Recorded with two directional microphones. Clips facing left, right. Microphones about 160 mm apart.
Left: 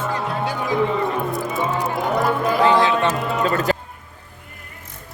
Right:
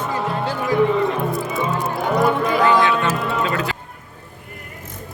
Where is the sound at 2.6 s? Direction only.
30° left (ahead or behind).